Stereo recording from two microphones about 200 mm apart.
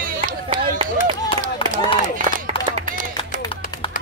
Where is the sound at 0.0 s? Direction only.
40° right (ahead or behind).